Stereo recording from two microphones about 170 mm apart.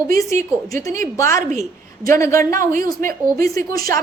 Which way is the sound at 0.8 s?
15° left (ahead or behind).